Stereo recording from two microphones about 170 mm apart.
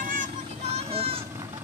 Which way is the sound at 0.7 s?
35° right (ahead or behind).